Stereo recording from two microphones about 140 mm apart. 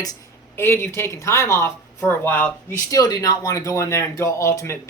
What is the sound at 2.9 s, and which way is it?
Speech, 25° left (ahead or behind).